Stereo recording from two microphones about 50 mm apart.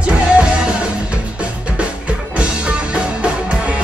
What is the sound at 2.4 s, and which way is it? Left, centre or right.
Music, right.